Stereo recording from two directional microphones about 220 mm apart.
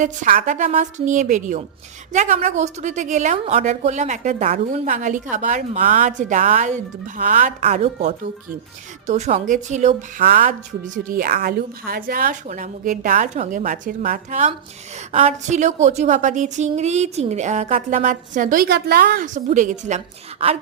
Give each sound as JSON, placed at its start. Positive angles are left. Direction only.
{"t": 0.0, "sound": "a woman's voice", "side_deg": -35}